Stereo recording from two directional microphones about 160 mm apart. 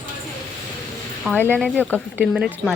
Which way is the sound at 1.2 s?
10° left (ahead or behind).